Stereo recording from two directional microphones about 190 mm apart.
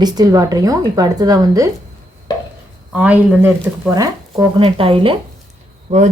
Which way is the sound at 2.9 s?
10° right (ahead or behind).